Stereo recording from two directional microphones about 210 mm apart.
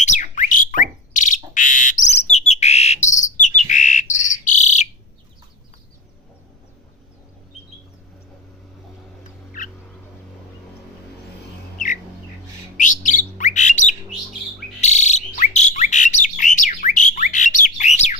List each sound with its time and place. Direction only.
0.0 s a sound: 35° left (ahead or behind)
1.5 s bird: 40° left (ahead or behind)
12.7 s bird: 35° left (ahead or behind)